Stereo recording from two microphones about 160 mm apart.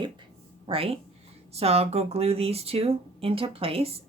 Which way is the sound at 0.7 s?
35° right (ahead or behind).